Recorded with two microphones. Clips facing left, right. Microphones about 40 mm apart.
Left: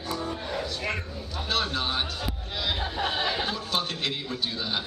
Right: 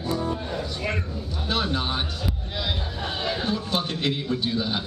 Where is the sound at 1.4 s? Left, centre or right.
Centre.